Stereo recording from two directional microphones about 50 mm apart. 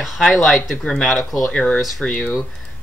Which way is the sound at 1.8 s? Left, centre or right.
Centre.